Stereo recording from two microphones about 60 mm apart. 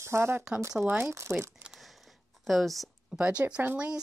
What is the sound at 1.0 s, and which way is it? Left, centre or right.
Speech, right.